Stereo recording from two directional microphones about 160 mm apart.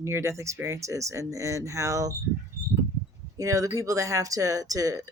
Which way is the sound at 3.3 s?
20° right (ahead or behind).